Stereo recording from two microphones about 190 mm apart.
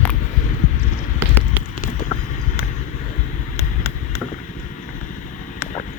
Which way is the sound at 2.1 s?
30° left (ahead or behind).